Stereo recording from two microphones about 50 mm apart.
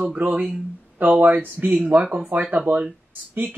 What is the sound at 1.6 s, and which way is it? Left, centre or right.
Speech, centre.